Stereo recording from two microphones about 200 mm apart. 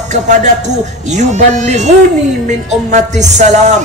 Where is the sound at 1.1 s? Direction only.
35° right (ahead or behind).